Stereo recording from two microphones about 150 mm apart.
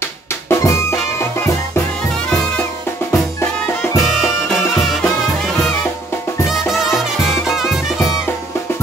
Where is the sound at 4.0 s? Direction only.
Centre (ahead or behind).